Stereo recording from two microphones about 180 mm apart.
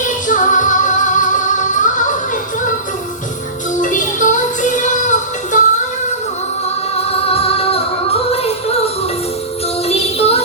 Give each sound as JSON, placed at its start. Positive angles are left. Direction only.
{"t": 0.0, "sound": "music", "side_deg": 45}
{"t": 3.8, "sound": "music", "side_deg": 45}
{"t": 6.9, "sound": "music", "side_deg": 35}
{"t": 9.8, "sound": "child singing", "side_deg": 35}